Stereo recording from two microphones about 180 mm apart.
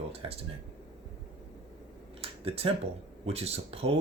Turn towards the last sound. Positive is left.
turn(degrees=-35)  # may be behind; listen again after turning